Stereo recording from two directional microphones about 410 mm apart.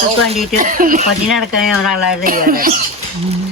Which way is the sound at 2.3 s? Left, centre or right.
Right.